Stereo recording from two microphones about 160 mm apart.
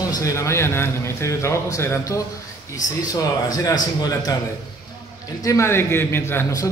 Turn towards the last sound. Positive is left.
turn(degrees=15)  # may be behind; listen again after turning